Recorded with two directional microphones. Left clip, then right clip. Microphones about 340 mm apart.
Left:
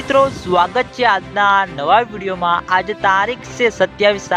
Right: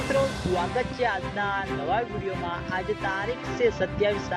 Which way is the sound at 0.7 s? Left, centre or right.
Left.